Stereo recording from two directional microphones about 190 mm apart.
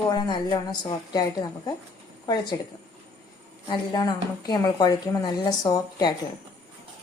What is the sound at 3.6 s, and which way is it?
A woman's voice, 25° left (ahead or behind).